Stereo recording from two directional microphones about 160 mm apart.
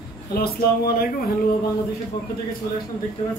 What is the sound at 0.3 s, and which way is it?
Speech, 75° left (ahead or behind).